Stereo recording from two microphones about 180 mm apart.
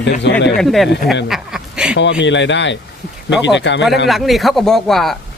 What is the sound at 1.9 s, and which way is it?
Speech, 85° left.